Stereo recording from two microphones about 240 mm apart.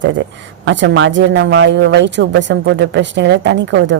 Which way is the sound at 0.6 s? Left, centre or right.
Right.